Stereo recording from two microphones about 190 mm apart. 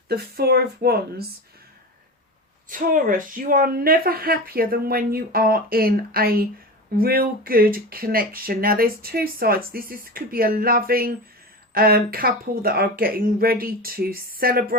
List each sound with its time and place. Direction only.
0.1 s speech: 55° right (ahead or behind)
2.6 s speech: 45° right (ahead or behind)